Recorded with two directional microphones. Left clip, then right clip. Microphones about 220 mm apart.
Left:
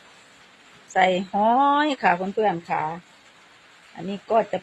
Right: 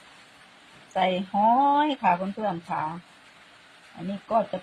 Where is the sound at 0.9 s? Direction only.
45° left (ahead or behind).